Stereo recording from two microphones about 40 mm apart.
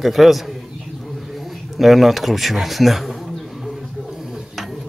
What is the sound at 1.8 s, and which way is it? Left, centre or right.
A man's voice, centre.